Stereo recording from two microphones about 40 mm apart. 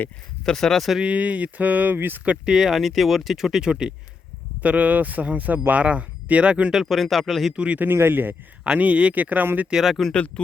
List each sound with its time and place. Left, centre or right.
0.4 s speech: centre
1.0 s speech: right
2.0 s speech: right
2.4 s speech: centre
3.7 s speech: right
4.6 s speech: right
6.7 s speech: centre
6.9 s speech: centre
7.5 s speech: right
7.9 s speech: right
8.6 s speech: right
9.8 s speech: centre
10.1 s speech: left